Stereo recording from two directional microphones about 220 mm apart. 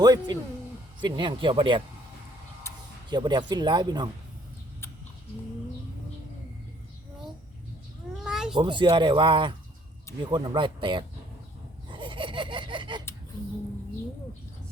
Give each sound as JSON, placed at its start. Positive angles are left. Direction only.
{"t": 0.0, "sound": "speech", "side_deg": -20}
{"t": 3.1, "sound": "speech", "side_deg": -20}
{"t": 8.1, "sound": "cat", "side_deg": -5}
{"t": 8.5, "sound": "speech", "side_deg": -20}
{"t": 11.9, "sound": "a sound", "side_deg": -20}